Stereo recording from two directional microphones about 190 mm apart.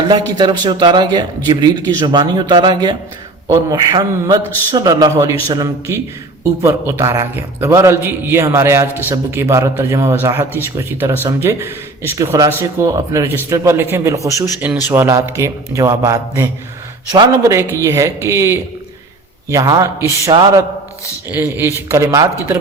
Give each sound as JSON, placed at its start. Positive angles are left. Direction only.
{"t": 0.1, "sound": "a man's voice", "side_deg": -20}